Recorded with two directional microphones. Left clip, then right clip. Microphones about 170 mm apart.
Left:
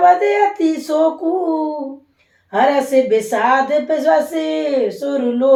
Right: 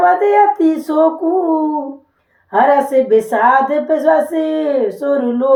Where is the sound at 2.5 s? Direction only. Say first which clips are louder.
Right 3 dB; 35° right (ahead or behind).